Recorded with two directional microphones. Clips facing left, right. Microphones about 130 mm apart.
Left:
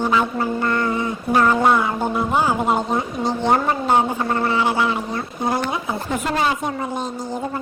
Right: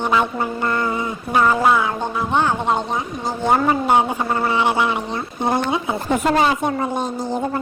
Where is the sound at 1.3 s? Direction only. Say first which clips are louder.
Even; 5° right (ahead or behind).